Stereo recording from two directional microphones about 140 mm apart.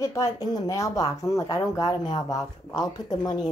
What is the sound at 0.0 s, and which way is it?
Speech, 20° left (ahead or behind).